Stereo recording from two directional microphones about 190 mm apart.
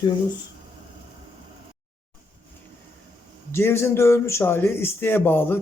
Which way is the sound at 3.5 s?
15° left (ahead or behind).